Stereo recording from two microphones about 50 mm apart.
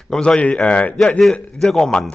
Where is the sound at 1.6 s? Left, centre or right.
Centre.